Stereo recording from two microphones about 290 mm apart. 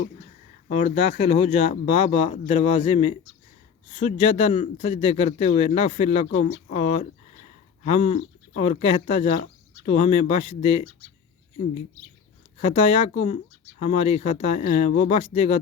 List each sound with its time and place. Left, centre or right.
0.7 s speech: left
12.5 s speech: left